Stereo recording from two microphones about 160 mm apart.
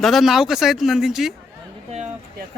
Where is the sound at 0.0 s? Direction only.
Centre (ahead or behind).